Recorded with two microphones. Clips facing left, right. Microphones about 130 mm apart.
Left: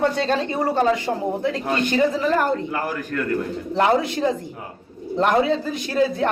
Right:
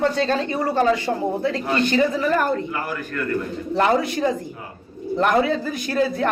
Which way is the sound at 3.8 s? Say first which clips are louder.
Even; 20° left (ahead or behind).